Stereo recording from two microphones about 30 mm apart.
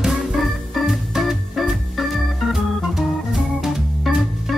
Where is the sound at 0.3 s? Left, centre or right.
Centre.